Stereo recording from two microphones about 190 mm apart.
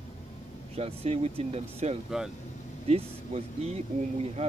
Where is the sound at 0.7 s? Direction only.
30° right (ahead or behind).